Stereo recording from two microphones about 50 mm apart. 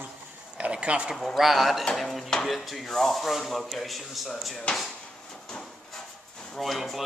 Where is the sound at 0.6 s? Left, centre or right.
Right.